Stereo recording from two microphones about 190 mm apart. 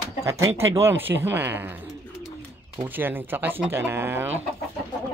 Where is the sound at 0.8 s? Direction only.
10° right (ahead or behind).